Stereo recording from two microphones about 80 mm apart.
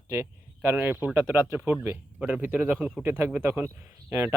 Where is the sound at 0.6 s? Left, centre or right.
Right.